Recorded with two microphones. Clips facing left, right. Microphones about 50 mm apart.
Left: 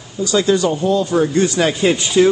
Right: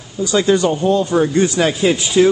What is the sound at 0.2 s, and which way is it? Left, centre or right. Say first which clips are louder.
Speech: right 1 dB; right.